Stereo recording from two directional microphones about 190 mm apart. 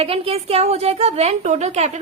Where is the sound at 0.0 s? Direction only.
30° right (ahead or behind).